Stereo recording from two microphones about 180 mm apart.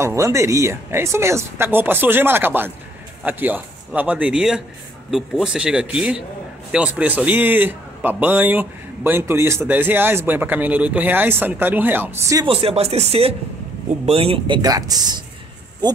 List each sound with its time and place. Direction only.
0.0 s a man's voice: 15° right (ahead or behind)
12.4 s speech: 30° right (ahead or behind)